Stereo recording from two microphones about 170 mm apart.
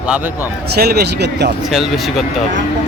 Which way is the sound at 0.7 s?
70° right (ahead or behind).